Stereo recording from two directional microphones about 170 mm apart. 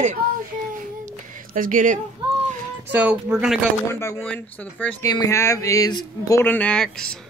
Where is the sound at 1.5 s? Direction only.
50° right (ahead or behind).